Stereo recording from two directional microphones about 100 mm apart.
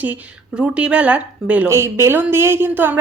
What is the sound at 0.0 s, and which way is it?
Speech, 15° right (ahead or behind).